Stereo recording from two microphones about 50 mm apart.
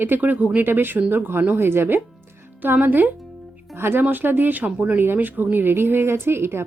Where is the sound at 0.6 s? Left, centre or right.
Right.